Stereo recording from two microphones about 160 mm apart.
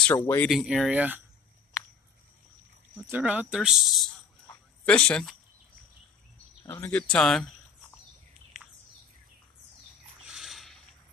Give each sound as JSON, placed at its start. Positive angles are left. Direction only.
{"t": 0.1, "sound": "speech", "side_deg": 20}
{"t": 0.5, "sound": "speech", "side_deg": 0}
{"t": 3.0, "sound": "speech", "side_deg": -10}
{"t": 6.7, "sound": "speech", "side_deg": 10}
{"t": 8.5, "sound": "bird", "side_deg": -5}
{"t": 10.2, "sound": "a sound", "side_deg": -5}